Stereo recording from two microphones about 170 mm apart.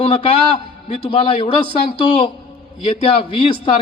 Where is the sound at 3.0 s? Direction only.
30° left (ahead or behind).